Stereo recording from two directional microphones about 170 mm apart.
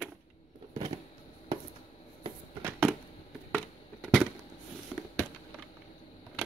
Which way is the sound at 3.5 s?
5° left (ahead or behind).